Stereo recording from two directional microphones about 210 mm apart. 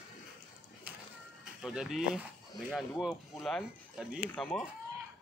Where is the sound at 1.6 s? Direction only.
5° right (ahead or behind).